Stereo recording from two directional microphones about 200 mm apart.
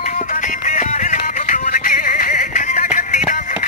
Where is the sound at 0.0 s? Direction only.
40° left (ahead or behind).